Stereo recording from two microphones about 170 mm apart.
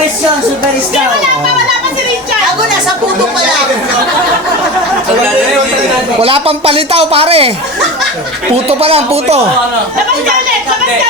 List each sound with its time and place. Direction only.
6.1 s a man's voice: 35° right (ahead or behind)
8.8 s a man's voice: 35° right (ahead or behind)